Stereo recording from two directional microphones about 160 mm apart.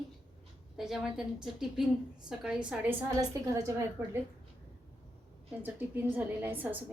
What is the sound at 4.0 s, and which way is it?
Speech, 10° right (ahead or behind).